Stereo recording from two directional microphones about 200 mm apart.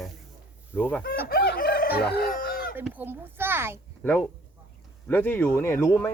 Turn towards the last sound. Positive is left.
turn(degrees=10)  # may be behind; listen again after turning